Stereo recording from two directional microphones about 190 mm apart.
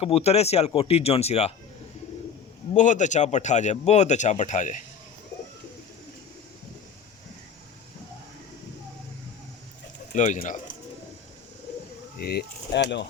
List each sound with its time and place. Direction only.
0.0 s speech: 30° left (ahead or behind)
2.7 s speech: 40° left (ahead or behind)
10.2 s speech: 35° left (ahead or behind)
12.1 s speech: 55° left (ahead or behind)